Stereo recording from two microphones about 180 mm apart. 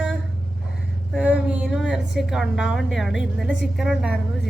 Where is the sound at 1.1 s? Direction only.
5° right (ahead or behind).